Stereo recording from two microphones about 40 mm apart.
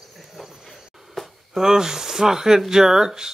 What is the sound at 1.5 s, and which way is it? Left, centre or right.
Speech, centre.